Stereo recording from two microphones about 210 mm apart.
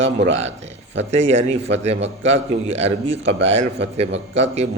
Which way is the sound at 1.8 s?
30° right (ahead or behind).